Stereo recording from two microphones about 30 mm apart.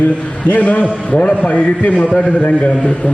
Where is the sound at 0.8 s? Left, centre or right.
Left.